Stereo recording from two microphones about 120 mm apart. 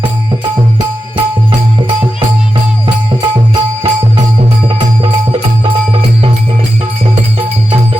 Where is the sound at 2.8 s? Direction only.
40° right (ahead or behind).